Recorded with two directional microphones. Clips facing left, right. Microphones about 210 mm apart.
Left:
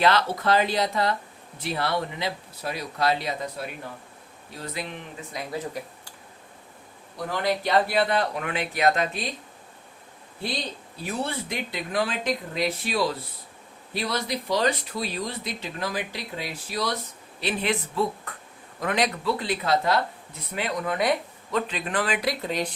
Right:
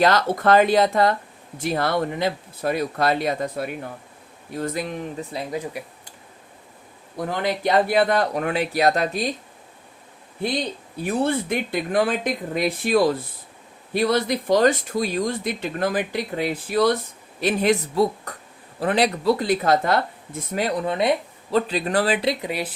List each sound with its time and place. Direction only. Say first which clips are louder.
0.0 s speech: right 4 dB; 45° right (ahead or behind)
4.5 s speech: right 8 dB; 45° right (ahead or behind)
5.5 s speech: right 3 dB; 10° right (ahead or behind)
7.3 s speech: right 3 dB; 50° right (ahead or behind)
11.0 s speech: right 8 dB; 50° right (ahead or behind)
17.4 s speech: right 7 dB; 40° right (ahead or behind); by 21.6 s 25° right (ahead or behind)
21.7 s speech: right 6 dB; 35° right (ahead or behind)
22.4 s speech: right 1 dB; 10° right (ahead or behind)